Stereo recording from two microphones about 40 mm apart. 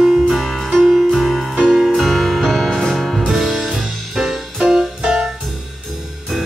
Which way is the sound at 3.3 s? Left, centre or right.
Centre.